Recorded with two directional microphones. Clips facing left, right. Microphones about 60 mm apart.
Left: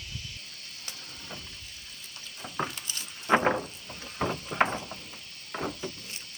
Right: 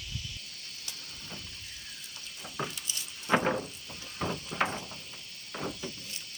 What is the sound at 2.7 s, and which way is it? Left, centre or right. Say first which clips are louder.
Keys jangling: left 2 dB; left.